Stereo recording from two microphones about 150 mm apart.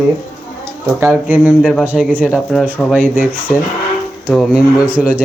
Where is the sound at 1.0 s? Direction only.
10° right (ahead or behind).